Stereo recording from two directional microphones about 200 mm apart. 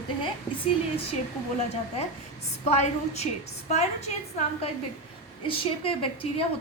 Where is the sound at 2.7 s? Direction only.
35° left (ahead or behind).